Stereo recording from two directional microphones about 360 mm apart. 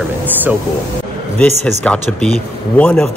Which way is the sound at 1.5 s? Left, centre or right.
Centre.